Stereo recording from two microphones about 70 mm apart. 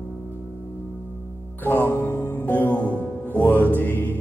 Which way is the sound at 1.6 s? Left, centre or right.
Left.